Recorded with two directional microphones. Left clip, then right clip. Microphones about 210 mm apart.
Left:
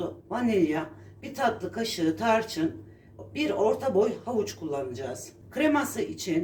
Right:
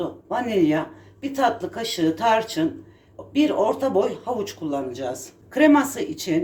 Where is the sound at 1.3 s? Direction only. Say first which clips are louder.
Right 6 dB; 50° right (ahead or behind).